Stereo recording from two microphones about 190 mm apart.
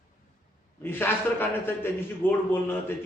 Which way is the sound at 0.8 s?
10° left (ahead or behind).